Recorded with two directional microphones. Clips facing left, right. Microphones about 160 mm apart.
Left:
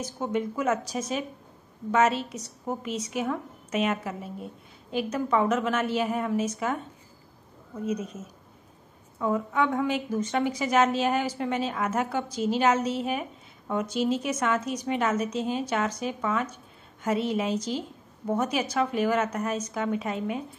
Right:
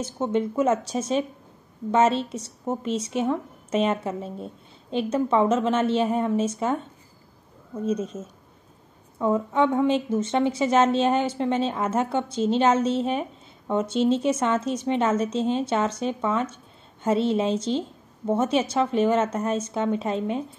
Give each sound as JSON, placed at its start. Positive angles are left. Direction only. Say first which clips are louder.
{"t": 0.0, "sound": "a woman's voice", "louder": "right 4 dB", "side_deg": -25}
{"t": 7.8, "sound": "a woman's voice", "louder": "right 4 dB", "side_deg": -30}
{"t": 9.2, "sound": "a woman's voice", "louder": "right 4 dB", "side_deg": -25}